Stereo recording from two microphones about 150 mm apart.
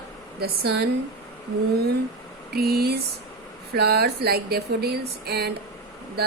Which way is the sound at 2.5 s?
90° right.